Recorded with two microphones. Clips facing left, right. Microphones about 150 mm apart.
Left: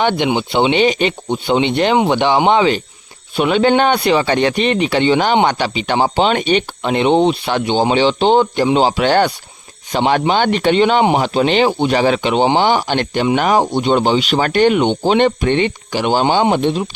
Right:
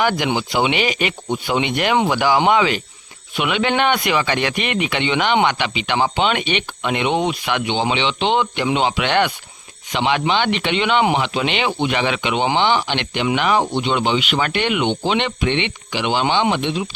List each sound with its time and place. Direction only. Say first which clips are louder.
0.0 s speech: left 3 dB; 25° left (ahead or behind); by 16.8 s 40° left (ahead or behind)